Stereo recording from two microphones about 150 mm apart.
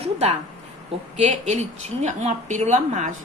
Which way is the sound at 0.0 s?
45° right (ahead or behind).